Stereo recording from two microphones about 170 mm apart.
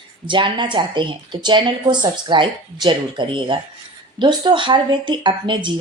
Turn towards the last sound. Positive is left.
turn(degrees=-30)  # may be behind; listen again after turning